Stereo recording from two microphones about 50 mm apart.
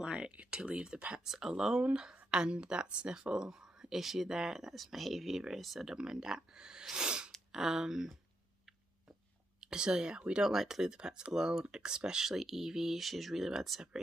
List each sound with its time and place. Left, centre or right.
0.0 s speech: right
1.2 s speech: centre
9.6 s speech: centre